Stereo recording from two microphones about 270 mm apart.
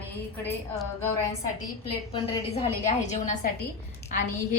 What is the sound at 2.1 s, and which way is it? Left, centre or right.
A woman's voice, left.